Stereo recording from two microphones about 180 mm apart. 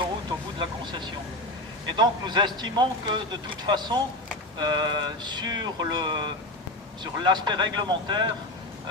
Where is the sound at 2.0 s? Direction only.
25° right (ahead or behind).